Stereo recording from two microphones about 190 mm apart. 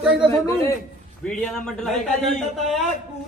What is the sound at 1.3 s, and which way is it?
A man's voice, 5° left (ahead or behind).